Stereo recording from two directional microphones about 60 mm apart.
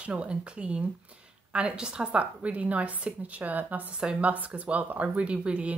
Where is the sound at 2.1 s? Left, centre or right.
Right.